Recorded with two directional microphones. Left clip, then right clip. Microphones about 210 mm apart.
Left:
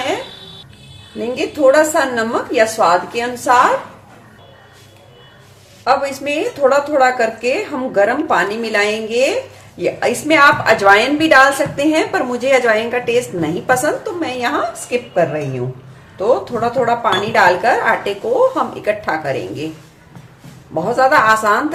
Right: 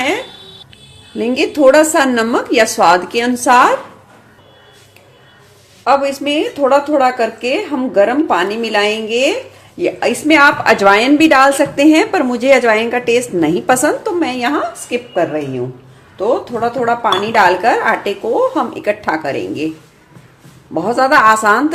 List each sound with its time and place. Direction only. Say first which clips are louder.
1.2 s a woman's voice: right 3 dB; 45° right (ahead or behind)
5.8 s a woman's voice: right 3 dB; 30° right (ahead or behind)
20.7 s a woman's voice: right 1 dB; 35° right (ahead or behind)